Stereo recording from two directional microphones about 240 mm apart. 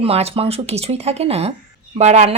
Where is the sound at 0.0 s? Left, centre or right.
Right.